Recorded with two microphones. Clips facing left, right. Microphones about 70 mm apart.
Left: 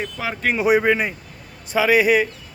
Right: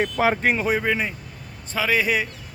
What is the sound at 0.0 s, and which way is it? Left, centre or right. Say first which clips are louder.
Speech: right 7 dB; right.